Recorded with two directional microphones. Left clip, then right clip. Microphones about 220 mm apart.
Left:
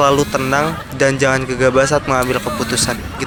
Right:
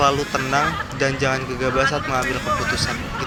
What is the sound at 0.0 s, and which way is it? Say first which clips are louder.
Speech: left 5 dB; 50° left (ahead or behind).